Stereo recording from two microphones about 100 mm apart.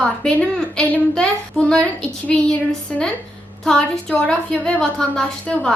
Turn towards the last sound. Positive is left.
turn(degrees=10)  # may be behind; listen again after turning